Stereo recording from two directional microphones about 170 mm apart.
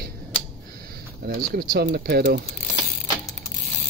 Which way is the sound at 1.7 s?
65° right (ahead or behind).